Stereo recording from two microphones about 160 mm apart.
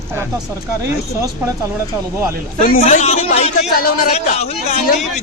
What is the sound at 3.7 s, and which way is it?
Speech, 65° left (ahead or behind).